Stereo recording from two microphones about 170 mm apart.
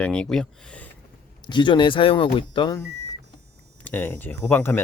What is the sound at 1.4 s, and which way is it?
Speech, 25° left (ahead or behind).